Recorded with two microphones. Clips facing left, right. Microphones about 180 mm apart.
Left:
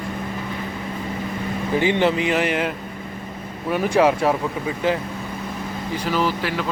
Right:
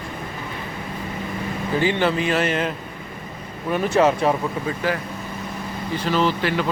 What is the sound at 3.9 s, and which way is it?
Speech, 10° left (ahead or behind).